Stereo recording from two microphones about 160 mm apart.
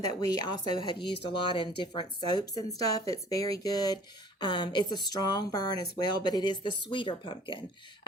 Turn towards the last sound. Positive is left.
turn(degrees=30)  # may be behind; listen again after turning